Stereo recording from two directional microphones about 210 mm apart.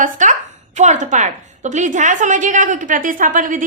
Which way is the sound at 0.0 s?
35° right (ahead or behind).